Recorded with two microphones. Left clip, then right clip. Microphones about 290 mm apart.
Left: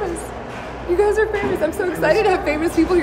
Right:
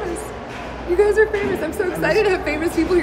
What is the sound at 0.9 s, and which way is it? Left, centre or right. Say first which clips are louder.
A woman's voice: right 1 dB; centre.